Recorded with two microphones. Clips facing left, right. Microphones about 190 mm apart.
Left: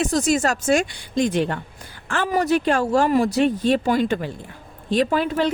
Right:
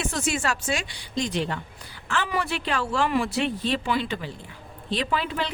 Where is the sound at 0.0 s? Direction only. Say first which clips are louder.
Left 8 dB; 40° left (ahead or behind).